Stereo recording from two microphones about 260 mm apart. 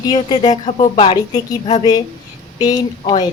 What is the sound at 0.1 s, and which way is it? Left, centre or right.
A woman's voice, centre.